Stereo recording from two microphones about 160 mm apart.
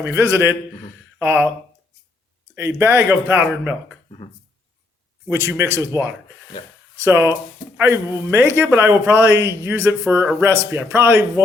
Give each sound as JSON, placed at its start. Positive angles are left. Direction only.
{"t": 0.0, "sound": "a man's voice", "side_deg": -15}
{"t": 2.6, "sound": "a man's voice", "side_deg": -15}
{"t": 5.3, "sound": "a man's voice", "side_deg": -15}